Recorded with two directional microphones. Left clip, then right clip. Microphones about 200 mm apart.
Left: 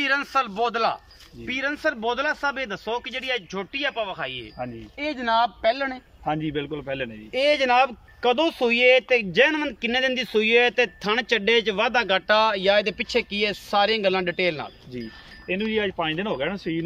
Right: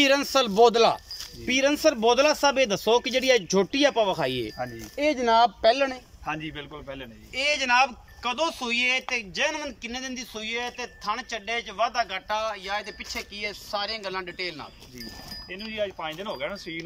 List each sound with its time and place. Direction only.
0.0 s speech: 15° right (ahead or behind)
4.9 s speech: 10° right (ahead or behind)
6.2 s a man's voice: 35° left (ahead or behind)